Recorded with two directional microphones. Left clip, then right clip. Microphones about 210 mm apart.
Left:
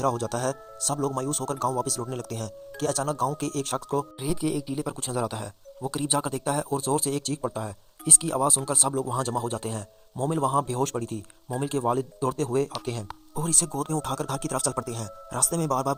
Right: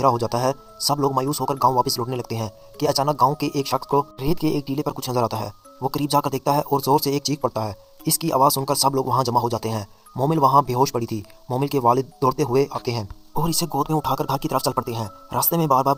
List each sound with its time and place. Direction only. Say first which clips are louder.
0.0 s speech: right 7 dB; 20° left (ahead or behind)
9.2 s speech: right 8 dB; 15° left (ahead or behind)
12.5 s speech: right 6 dB; 20° left (ahead or behind)